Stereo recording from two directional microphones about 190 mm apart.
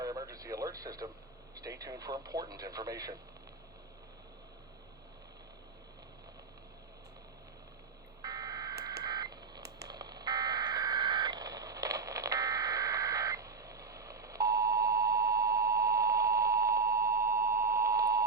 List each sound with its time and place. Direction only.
0.0 s radio: 20° right (ahead or behind)
1.5 s speech: 20° right (ahead or behind)
8.2 s telephone dialing: 20° right (ahead or behind)